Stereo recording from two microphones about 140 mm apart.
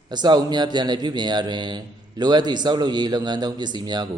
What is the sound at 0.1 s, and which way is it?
A man's voice, 30° right (ahead or behind).